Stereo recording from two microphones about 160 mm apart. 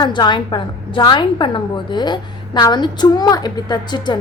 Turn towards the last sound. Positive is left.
turn(degrees=25)  # may be behind; listen again after turning